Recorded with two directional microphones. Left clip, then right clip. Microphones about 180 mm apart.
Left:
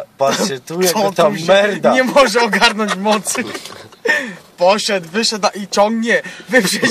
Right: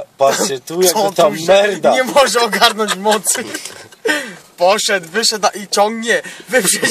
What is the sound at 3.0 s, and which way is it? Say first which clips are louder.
Speech: right 1 dB; 20° right (ahead or behind).